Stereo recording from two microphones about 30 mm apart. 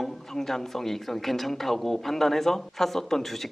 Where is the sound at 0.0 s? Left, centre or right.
Centre.